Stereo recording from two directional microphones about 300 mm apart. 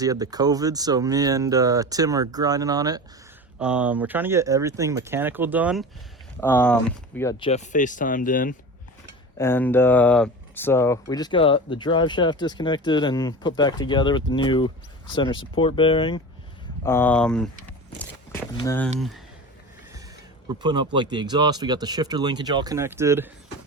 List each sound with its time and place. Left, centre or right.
0.0 s speech: centre
6.4 s speech: centre; by 8.5 s left
9.4 s speech: centre
20.6 s speech: centre